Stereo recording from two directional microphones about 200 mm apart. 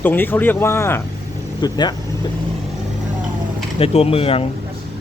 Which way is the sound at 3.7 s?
30° left (ahead or behind).